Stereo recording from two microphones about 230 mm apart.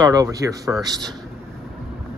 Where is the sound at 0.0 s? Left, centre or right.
Centre.